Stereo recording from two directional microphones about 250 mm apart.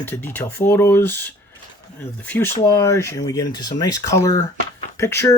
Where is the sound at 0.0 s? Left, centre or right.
Centre.